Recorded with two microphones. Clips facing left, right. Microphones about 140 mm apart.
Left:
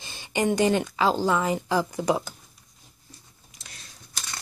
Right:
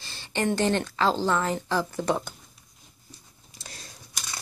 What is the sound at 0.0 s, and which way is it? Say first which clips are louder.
A woman's voice: left 2 dB; 15° left (ahead or behind).